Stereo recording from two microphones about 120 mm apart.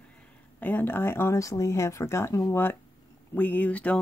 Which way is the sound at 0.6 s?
15° left (ahead or behind).